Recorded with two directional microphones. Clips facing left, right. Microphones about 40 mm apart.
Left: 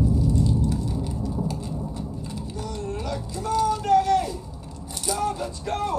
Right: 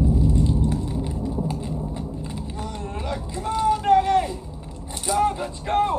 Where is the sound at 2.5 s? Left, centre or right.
Right.